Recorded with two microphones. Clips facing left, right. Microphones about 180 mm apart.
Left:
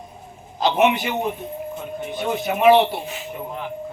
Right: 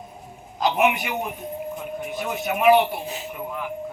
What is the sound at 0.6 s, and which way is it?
Speech, 30° left (ahead or behind).